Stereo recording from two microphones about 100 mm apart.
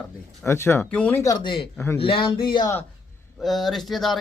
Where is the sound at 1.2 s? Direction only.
35° left (ahead or behind).